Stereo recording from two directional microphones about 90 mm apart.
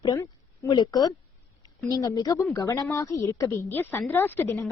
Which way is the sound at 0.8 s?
50° left (ahead or behind).